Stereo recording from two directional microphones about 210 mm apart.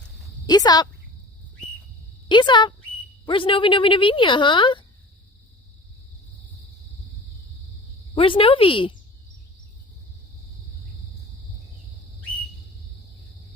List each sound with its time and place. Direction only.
0.4 s speech: 20° left (ahead or behind)
2.3 s speech: 20° left (ahead or behind)
8.1 s speech: 25° left (ahead or behind)